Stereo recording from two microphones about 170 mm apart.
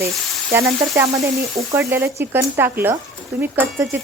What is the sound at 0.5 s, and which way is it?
A woman's voice, 15° right (ahead or behind).